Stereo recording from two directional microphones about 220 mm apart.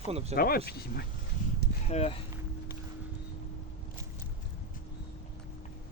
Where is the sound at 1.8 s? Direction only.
30° left (ahead or behind).